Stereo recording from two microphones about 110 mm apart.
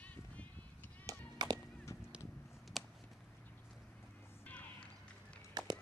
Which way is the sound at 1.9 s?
25° left (ahead or behind).